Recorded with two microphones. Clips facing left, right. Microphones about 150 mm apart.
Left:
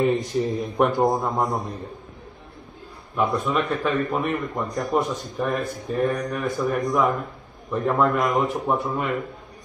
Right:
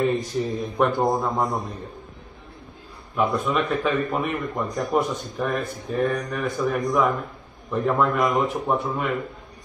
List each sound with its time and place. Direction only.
0.1 s a man's voice: 20° left (ahead or behind)
0.8 s speech: centre (ahead or behind)
3.2 s speech: centre (ahead or behind)